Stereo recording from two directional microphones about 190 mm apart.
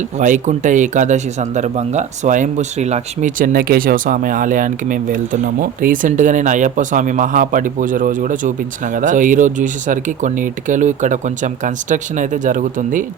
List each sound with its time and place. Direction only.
0.2 s speech: 40° right (ahead or behind)